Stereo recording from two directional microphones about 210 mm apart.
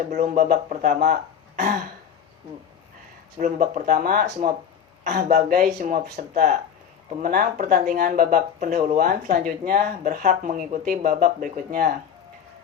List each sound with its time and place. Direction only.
0.2 s speech: 45° right (ahead or behind)
3.3 s speech: 40° right (ahead or behind)